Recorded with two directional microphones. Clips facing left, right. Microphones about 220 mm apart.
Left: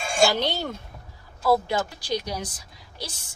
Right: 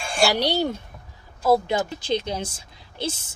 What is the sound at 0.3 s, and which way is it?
A woman's voice, 15° right (ahead or behind).